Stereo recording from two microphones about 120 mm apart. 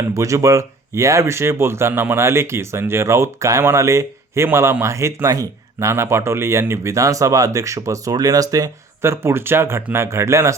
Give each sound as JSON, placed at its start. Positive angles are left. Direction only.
{"t": 0.1, "sound": "speech", "side_deg": -25}